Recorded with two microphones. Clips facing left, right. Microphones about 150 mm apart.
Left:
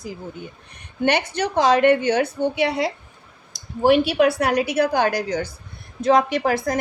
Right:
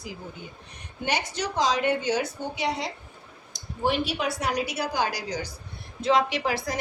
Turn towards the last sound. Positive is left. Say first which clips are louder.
# left 7 dB
turn(degrees=50)  # may be behind; listen again after turning